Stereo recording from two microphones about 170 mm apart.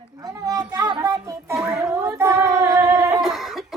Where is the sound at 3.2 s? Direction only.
Centre (ahead or behind).